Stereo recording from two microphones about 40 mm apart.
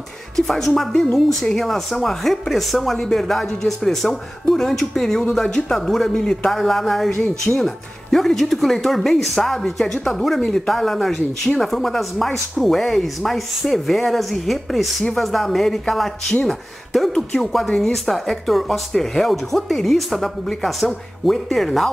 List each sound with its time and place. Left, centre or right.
0.5 s speech: centre
11.1 s speech: centre
11.6 s speech: centre